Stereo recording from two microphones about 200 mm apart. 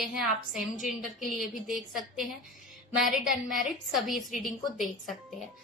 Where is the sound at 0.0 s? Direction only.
Centre (ahead or behind).